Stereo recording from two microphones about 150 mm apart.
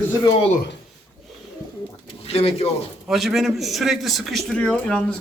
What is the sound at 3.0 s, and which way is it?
A man's voice, centre (ahead or behind).